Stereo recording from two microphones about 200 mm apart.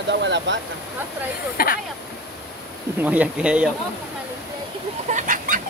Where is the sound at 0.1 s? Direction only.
65° right (ahead or behind).